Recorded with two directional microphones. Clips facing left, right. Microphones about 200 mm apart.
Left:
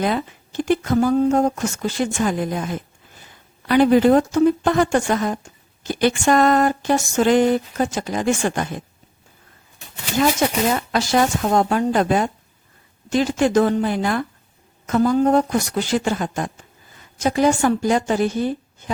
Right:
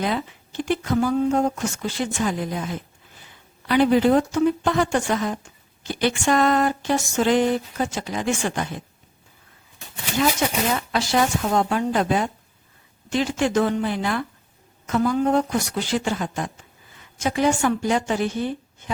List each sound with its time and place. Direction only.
0.0 s speech: 45° left (ahead or behind)
10.8 s a woman's voice: 45° left (ahead or behind)